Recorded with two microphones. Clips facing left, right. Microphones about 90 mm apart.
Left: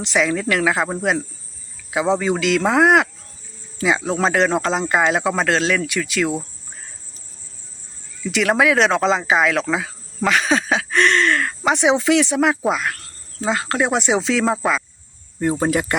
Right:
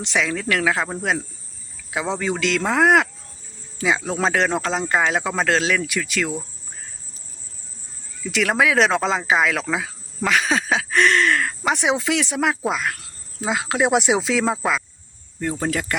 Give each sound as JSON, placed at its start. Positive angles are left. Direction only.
{"t": 0.0, "sound": "speech", "side_deg": 0}
{"t": 8.2, "sound": "speech", "side_deg": 0}
{"t": 15.4, "sound": "speech", "side_deg": 20}